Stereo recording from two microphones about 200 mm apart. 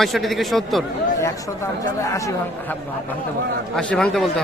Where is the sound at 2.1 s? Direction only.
15° left (ahead or behind).